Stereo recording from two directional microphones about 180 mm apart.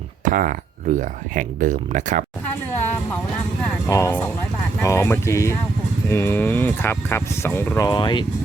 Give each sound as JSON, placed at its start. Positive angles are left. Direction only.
{"t": 0.3, "sound": "speech", "side_deg": -45}
{"t": 3.8, "sound": "speech", "side_deg": 15}
{"t": 7.9, "sound": "speech", "side_deg": 25}